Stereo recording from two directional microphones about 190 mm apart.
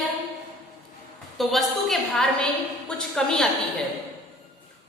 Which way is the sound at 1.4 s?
Centre (ahead or behind).